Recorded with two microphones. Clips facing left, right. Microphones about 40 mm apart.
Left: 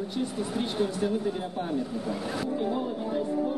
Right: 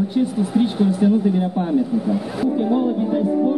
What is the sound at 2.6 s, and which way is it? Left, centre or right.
Speech, right.